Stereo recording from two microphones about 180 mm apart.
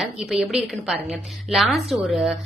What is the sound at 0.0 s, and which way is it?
A woman's voice, centre (ahead or behind).